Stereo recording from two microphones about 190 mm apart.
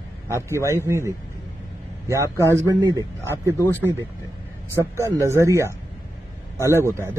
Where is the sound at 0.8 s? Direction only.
15° right (ahead or behind).